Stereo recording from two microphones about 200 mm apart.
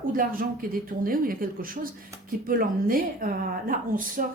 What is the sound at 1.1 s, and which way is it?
Speech, 45° right (ahead or behind).